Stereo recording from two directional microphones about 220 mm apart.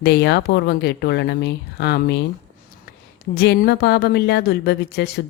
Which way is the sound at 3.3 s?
45° left (ahead or behind).